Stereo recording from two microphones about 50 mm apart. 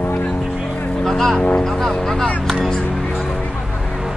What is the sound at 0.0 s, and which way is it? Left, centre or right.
Vehicle, left.